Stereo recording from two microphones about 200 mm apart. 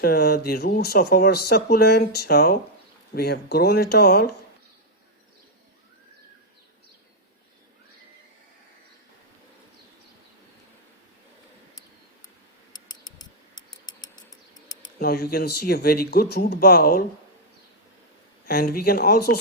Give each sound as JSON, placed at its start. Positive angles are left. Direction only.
{"t": 0.0, "sound": "speech", "side_deg": 50}
{"t": 12.7, "sound": "a sound", "side_deg": 20}
{"t": 14.8, "sound": "speech", "side_deg": 50}
{"t": 18.4, "sound": "speech", "side_deg": 50}